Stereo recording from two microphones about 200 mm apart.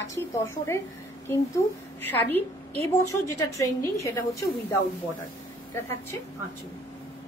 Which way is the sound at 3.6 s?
15° left (ahead or behind).